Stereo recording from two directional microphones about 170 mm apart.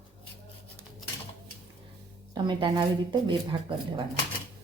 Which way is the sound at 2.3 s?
30° right (ahead or behind).